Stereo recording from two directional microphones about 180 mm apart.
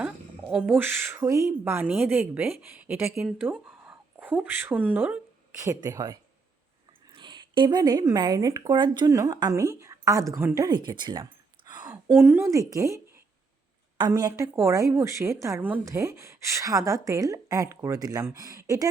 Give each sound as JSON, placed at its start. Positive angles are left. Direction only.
{"t": 0.0, "sound": "speech", "side_deg": -5}
{"t": 11.9, "sound": "a woman's voice", "side_deg": -10}
{"t": 14.0, "sound": "speech", "side_deg": -20}